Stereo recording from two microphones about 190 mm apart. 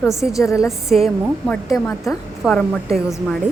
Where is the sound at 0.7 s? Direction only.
Centre (ahead or behind).